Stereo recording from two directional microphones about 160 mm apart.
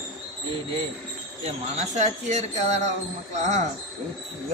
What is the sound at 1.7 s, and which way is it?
Speech, 50° right (ahead or behind).